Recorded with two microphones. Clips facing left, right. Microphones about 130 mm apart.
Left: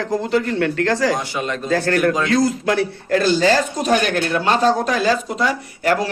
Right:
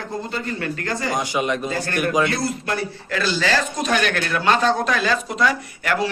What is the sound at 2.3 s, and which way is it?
Speech, 90° left.